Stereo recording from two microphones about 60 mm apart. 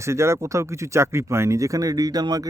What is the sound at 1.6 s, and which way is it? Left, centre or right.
Speech, right.